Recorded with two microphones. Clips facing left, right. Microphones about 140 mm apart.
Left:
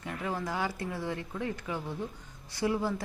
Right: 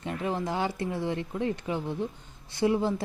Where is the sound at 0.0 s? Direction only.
20° right (ahead or behind).